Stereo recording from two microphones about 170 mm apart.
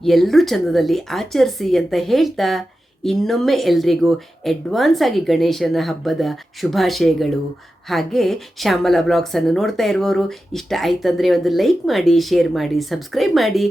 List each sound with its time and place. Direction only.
0.0 s a woman's voice: centre (ahead or behind)